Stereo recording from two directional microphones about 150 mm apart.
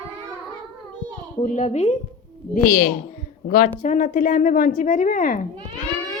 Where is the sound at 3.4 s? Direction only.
65° left (ahead or behind).